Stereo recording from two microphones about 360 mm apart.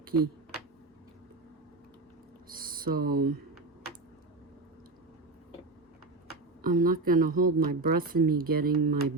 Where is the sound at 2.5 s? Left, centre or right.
Right.